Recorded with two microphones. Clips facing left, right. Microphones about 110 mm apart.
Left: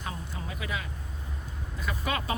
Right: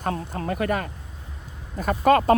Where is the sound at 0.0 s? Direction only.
60° right (ahead or behind).